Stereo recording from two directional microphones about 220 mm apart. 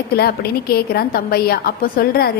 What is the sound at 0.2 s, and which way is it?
A woman's voice, 45° left (ahead or behind).